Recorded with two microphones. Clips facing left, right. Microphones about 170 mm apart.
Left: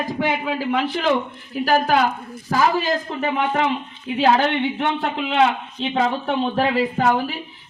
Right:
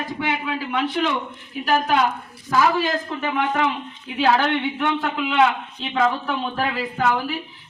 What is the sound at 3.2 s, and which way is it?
A woman's voice, 30° left (ahead or behind).